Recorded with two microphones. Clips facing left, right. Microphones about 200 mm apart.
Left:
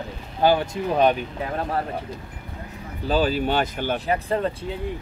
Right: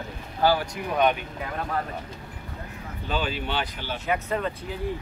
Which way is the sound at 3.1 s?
40° left (ahead or behind).